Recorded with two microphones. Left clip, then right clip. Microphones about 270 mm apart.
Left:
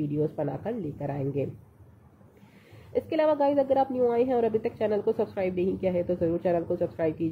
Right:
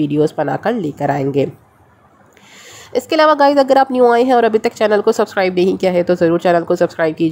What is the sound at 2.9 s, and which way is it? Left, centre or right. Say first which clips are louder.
A woman's voice: right 13 dB; right.